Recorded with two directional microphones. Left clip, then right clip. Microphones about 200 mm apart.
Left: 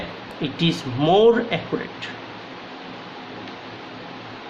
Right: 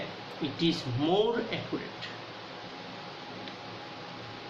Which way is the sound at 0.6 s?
50° left (ahead or behind).